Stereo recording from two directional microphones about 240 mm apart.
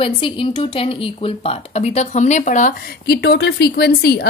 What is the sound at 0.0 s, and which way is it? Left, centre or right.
A woman's voice, left.